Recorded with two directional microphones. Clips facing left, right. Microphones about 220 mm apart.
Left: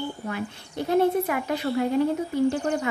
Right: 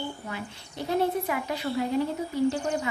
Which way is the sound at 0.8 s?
55° left (ahead or behind).